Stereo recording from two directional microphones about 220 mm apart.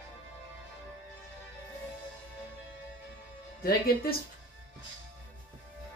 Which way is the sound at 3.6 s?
45° left (ahead or behind).